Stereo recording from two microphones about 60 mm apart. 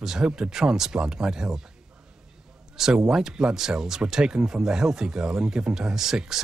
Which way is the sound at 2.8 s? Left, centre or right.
Centre.